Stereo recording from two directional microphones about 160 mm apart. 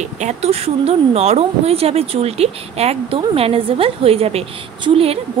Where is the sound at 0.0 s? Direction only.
45° right (ahead or behind).